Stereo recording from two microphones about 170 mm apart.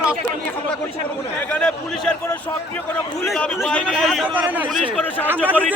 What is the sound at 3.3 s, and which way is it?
A man's voice, 5° left (ahead or behind).